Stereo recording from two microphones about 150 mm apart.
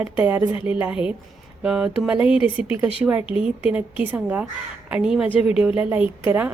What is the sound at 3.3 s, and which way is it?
A woman's voice, 10° right (ahead or behind).